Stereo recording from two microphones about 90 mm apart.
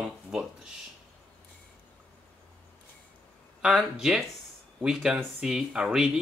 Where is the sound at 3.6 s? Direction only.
10° right (ahead or behind).